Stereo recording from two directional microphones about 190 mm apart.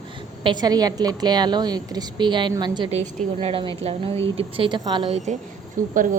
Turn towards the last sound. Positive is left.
turn(degrees=-45)  # may be behind; listen again after turning